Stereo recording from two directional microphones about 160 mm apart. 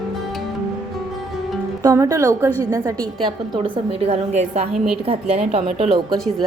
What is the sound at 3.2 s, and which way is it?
A woman's voice, 30° right (ahead or behind).